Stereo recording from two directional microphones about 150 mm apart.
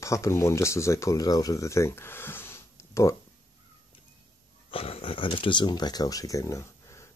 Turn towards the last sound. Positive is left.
turn(degrees=20)  # may be behind; listen again after turning